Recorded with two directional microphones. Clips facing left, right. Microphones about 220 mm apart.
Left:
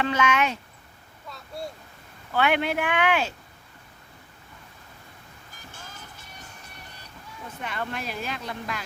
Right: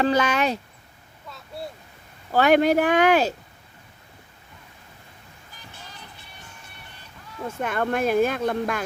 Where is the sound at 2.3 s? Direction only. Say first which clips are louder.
Right 7 dB; 40° right (ahead or behind).